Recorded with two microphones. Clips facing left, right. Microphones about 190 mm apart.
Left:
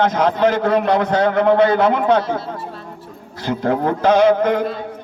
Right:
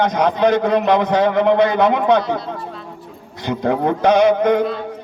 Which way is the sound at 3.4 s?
15° right (ahead or behind).